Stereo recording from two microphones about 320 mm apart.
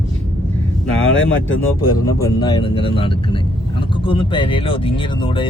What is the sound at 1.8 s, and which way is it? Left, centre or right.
Speech, centre.